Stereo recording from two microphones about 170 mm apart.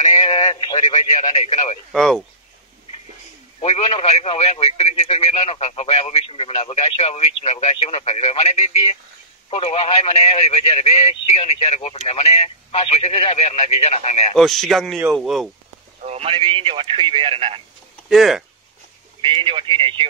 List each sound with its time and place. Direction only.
0.2 s radio: 30° left (ahead or behind)
1.3 s speech: 40° left (ahead or behind)
1.9 s speech: centre (ahead or behind)
3.6 s speech: 40° left (ahead or behind)
14.3 s speech: centre (ahead or behind)
16.0 s speech: 40° right (ahead or behind)
18.0 s speech: centre (ahead or behind)
19.2 s speech: 30° right (ahead or behind)